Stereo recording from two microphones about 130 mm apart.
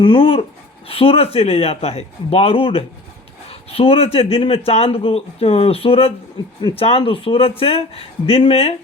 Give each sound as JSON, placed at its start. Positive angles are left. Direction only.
{"t": 0.0, "sound": "speech", "side_deg": 40}
{"t": 6.6, "sound": "speech", "side_deg": 35}
{"t": 6.8, "sound": "speech", "side_deg": 45}